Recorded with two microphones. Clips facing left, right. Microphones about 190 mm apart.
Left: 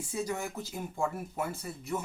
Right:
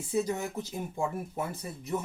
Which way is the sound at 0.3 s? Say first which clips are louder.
Right 2 dB; 20° right (ahead or behind).